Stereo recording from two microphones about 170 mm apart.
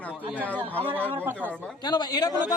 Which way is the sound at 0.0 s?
10° left (ahead or behind).